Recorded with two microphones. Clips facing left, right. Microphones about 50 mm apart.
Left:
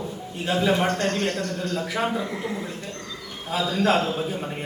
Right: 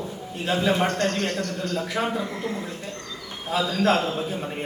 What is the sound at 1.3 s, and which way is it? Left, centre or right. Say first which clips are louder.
Speech: left 1 dB; left.